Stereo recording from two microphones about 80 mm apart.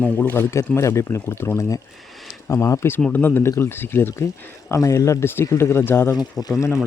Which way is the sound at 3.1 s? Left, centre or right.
Left.